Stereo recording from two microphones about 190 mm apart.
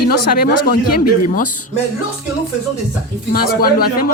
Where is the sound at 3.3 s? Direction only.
50° left (ahead or behind).